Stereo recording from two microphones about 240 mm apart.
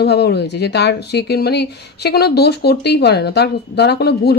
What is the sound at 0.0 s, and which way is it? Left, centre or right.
Speech, left.